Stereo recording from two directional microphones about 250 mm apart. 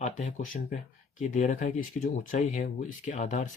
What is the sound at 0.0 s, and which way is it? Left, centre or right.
Speech, left.